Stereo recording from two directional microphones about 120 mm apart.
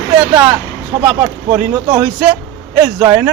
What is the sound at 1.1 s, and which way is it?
A man's voice, 10° right (ahead or behind).